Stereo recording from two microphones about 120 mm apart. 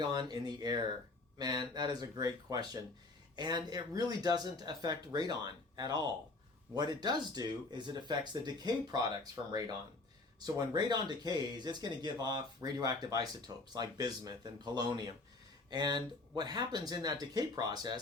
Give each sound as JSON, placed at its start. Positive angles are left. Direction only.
{"t": 0.0, "sound": "speech", "side_deg": -35}